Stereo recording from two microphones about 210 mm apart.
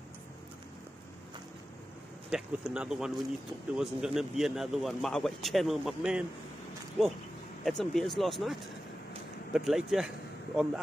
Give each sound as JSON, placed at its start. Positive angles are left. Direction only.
{"t": 2.3, "sound": "a man's voice", "side_deg": -5}